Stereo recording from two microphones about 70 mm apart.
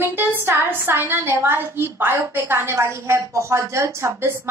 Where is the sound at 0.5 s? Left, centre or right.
Right.